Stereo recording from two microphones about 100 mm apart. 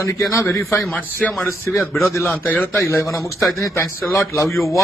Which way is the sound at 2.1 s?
15° left (ahead or behind).